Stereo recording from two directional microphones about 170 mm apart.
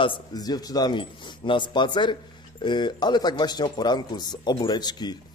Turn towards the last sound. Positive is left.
turn(degrees=25)  # may be behind; listen again after turning